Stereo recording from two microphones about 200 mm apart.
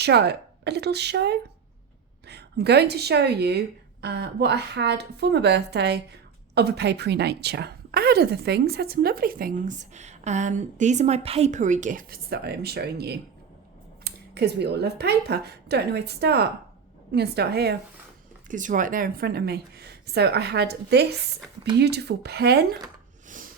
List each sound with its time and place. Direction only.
0.0 s a woman's voice: 55° right (ahead or behind)
18.4 s a woman's voice: 40° right (ahead or behind)